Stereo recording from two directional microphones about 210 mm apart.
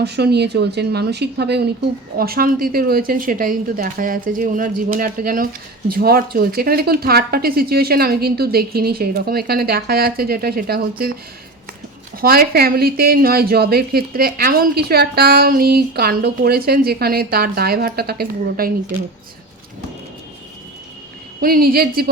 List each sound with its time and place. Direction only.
0.0 s speech: 50° right (ahead or behind)
12.2 s speech: 45° right (ahead or behind)
21.4 s speech: 45° right (ahead or behind)